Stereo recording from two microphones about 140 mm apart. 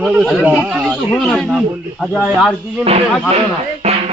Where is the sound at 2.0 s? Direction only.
5° left (ahead or behind).